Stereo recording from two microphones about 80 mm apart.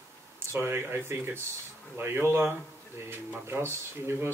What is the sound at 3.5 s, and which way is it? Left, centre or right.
Speech, right.